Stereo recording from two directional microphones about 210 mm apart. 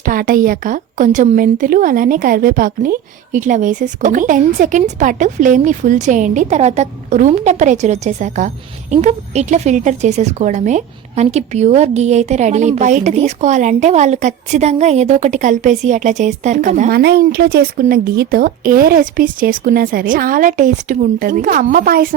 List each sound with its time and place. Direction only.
0.0 s a woman's voice: 40° right (ahead or behind)
17.0 s speech: 50° right (ahead or behind)